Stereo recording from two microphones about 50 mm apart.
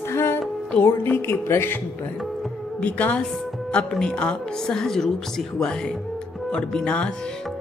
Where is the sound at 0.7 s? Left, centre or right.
Left.